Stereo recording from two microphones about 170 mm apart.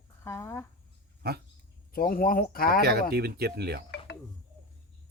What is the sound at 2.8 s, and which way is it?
Speech, 70° right (ahead or behind).